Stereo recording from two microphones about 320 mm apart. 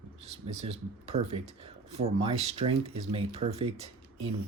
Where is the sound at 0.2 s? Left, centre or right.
Centre.